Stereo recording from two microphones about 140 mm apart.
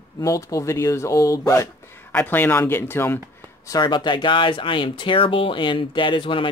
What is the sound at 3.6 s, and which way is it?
Speech, 30° left (ahead or behind).